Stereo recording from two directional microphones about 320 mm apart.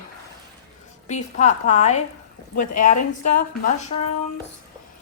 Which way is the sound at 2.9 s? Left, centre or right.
Left.